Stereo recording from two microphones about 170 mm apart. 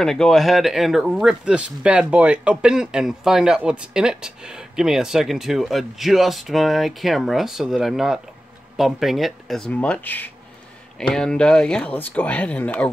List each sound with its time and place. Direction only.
0.0 s speech: centre (ahead or behind)